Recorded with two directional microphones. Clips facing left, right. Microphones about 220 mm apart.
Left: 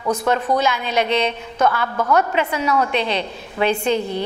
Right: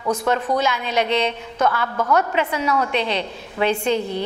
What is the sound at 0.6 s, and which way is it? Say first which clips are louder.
Speech: left 1 dB; 15° left (ahead or behind).